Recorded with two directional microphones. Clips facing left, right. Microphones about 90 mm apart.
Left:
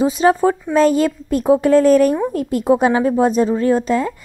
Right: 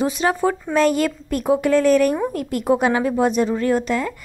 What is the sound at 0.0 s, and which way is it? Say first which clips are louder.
Speech: left 5 dB; 30° left (ahead or behind).